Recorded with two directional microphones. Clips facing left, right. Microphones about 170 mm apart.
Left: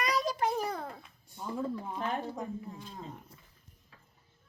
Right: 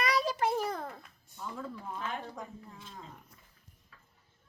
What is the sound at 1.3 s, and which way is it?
Speech, 30° left (ahead or behind).